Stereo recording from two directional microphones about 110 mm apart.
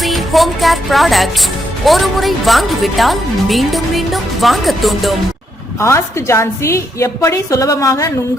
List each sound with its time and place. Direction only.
0.0 s music: centre (ahead or behind)
1.8 s a woman's voice: centre (ahead or behind)
5.8 s a woman's voice: 25° left (ahead or behind)